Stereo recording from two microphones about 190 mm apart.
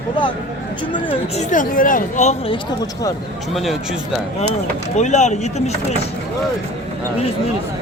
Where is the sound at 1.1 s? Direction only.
40° left (ahead or behind).